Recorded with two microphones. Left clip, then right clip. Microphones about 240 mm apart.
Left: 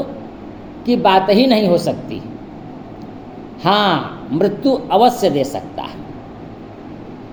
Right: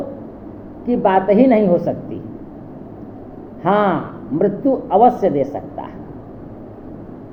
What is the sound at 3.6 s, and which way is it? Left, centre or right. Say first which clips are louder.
A man's voice: left 2 dB; left.